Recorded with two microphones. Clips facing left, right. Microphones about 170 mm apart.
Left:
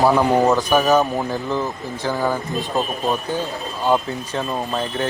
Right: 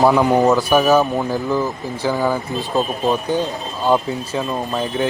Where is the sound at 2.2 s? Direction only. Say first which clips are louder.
Right 2 dB; 20° right (ahead or behind).